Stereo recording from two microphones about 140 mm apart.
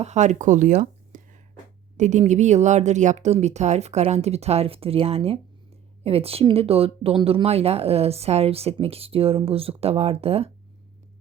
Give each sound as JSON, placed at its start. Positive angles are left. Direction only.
{"t": 0.0, "sound": "speech", "side_deg": -55}